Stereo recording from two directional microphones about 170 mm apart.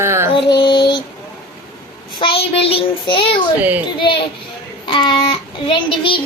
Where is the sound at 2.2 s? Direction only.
30° left (ahead or behind).